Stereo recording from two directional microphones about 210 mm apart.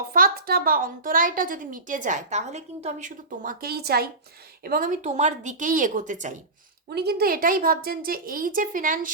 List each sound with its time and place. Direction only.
0.1 s a woman's voice: 45° right (ahead or behind)
6.9 s a woman's voice: 50° right (ahead or behind)